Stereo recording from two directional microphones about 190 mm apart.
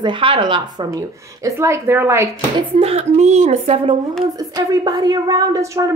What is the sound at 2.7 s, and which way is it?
A woman's voice, 30° right (ahead or behind).